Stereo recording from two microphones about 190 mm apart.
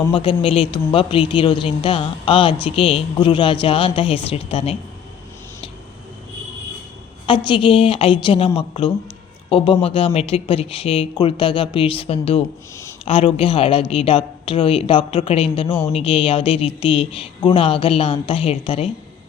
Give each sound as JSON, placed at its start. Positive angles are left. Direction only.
{"t": 0.1, "sound": "a woman's voice", "side_deg": 25}
{"t": 7.3, "sound": "a woman's voice", "side_deg": 25}